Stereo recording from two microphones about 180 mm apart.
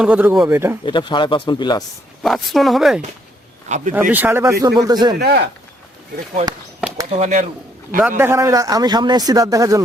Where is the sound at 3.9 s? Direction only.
10° right (ahead or behind).